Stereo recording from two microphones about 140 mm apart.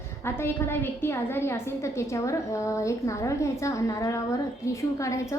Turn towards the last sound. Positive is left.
turn(degrees=20)  # may be behind; listen again after turning